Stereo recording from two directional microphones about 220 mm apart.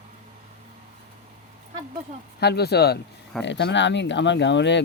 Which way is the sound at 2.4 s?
50° left (ahead or behind).